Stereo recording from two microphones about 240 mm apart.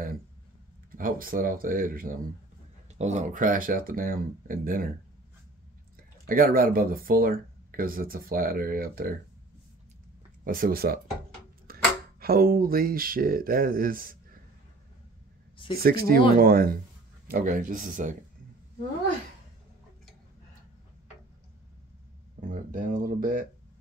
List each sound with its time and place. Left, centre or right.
0.9 s speech: right
5.9 s speech: right
10.4 s speech: right
11.7 s a sound: right
12.2 s speech: right
15.7 s speech: right
22.5 s a sound: right